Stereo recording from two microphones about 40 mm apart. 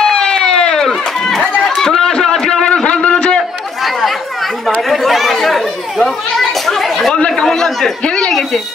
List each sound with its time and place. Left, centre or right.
0.0 s run: centre
1.8 s a sound: centre
3.8 s chatter: centre
7.2 s chatter: left
7.4 s chatter: centre
8.0 s a sound: left